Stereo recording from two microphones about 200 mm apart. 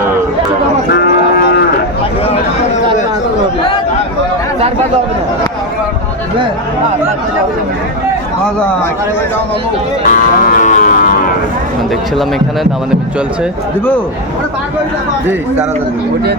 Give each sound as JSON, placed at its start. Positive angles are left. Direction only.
{"t": 10.1, "sound": "music", "side_deg": 40}